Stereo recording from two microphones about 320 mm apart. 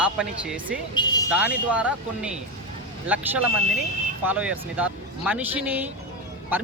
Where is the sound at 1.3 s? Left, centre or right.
Centre.